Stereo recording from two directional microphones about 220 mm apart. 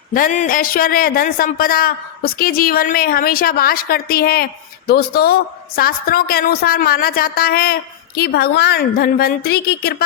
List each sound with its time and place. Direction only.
0.1 s a man's voice: 35° left (ahead or behind)